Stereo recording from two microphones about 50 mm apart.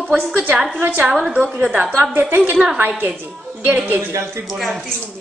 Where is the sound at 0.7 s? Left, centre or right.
Right.